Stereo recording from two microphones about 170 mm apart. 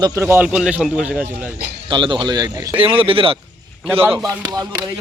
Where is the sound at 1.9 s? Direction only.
30° right (ahead or behind).